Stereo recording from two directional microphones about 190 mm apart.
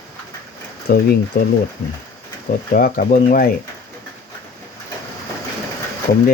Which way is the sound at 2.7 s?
45° left (ahead or behind).